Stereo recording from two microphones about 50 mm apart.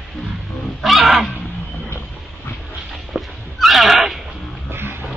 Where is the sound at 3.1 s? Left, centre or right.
Centre.